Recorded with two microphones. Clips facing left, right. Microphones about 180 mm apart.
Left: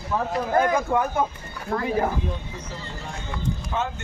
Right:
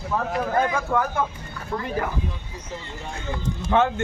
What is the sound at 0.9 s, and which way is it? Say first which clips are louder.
Speech: left 1 dB; 20° left (ahead or behind).